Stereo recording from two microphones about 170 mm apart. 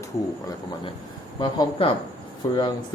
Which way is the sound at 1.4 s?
30° left (ahead or behind).